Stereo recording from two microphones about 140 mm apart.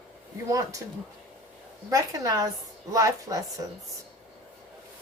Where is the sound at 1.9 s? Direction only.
25° right (ahead or behind).